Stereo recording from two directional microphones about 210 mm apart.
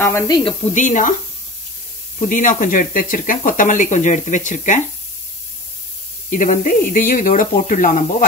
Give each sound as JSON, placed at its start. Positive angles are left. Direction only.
{"t": 0.0, "sound": "speech", "side_deg": 15}
{"t": 0.7, "sound": "speech", "side_deg": 35}
{"t": 2.1, "sound": "speech", "side_deg": 40}
{"t": 6.3, "sound": "speech", "side_deg": 40}